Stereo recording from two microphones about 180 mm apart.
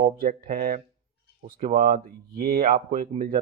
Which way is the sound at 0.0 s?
50° right (ahead or behind).